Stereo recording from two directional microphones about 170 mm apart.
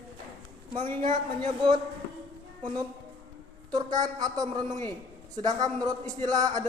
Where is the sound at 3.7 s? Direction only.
20° right (ahead or behind).